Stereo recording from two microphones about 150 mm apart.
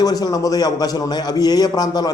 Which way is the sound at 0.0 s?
25° left (ahead or behind).